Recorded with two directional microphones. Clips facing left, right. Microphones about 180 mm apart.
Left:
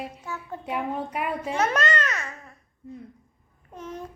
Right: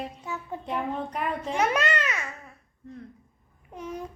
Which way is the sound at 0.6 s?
10° left (ahead or behind).